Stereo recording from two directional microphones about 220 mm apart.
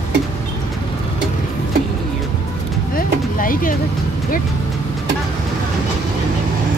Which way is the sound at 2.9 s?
40° left (ahead or behind).